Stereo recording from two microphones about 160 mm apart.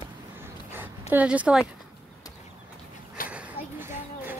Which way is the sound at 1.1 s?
10° right (ahead or behind).